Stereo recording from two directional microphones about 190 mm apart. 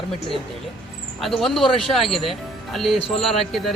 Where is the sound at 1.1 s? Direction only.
Centre (ahead or behind).